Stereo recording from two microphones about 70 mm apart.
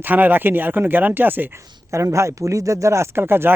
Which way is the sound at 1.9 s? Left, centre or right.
Right.